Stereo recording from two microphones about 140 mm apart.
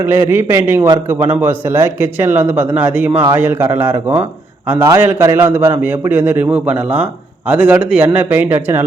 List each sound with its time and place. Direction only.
0.0 s a man's voice: 15° right (ahead or behind)